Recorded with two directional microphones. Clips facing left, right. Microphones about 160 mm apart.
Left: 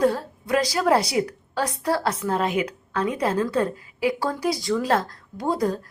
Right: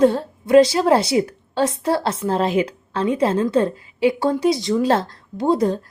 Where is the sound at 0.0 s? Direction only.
25° right (ahead or behind).